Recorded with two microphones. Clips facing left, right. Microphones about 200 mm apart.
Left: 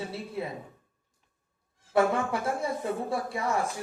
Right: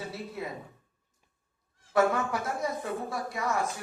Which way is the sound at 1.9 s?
30° left (ahead or behind).